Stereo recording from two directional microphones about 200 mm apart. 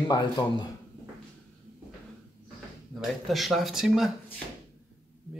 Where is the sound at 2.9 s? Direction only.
Centre (ahead or behind).